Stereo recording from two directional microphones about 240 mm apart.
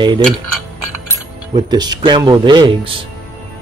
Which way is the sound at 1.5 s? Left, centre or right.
Centre.